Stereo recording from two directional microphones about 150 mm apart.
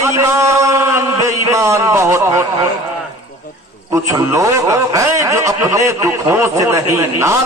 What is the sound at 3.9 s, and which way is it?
A man's voice, 20° right (ahead or behind).